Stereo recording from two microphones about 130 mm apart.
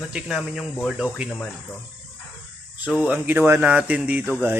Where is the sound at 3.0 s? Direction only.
10° right (ahead or behind).